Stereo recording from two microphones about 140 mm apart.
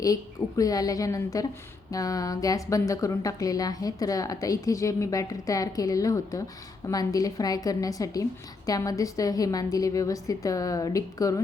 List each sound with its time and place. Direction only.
0.0 s a woman's voice: 25° left (ahead or behind)